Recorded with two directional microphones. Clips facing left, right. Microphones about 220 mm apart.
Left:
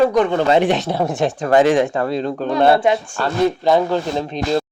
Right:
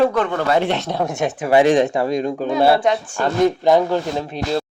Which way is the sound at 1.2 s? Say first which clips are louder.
Even; 5° right (ahead or behind).